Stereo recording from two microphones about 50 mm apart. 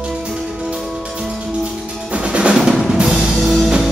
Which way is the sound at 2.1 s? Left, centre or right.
Right.